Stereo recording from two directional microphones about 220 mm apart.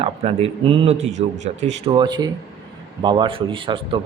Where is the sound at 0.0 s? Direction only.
25° right (ahead or behind).